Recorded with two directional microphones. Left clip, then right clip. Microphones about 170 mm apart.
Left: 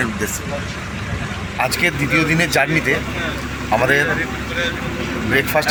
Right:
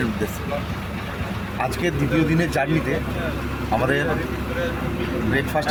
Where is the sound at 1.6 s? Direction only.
Centre (ahead or behind).